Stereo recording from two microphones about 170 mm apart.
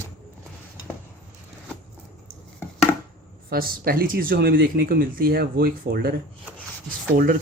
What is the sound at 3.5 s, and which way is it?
Speech, 60° right (ahead or behind).